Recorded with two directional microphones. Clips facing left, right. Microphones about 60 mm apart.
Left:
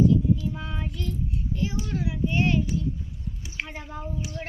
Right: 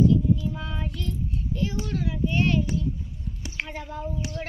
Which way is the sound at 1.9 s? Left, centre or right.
Centre.